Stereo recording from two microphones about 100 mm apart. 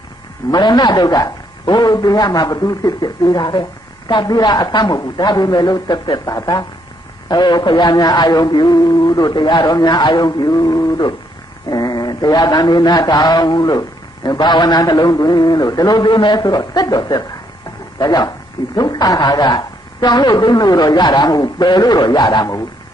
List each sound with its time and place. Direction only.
0.5 s a man's voice: 50° left (ahead or behind)